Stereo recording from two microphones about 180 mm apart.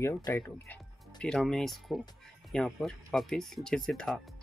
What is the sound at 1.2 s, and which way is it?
Speech, 5° left (ahead or behind).